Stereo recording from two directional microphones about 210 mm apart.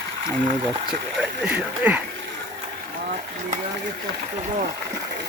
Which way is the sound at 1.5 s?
5° right (ahead or behind).